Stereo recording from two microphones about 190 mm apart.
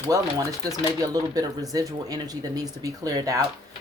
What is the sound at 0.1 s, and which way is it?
Speech, 20° right (ahead or behind).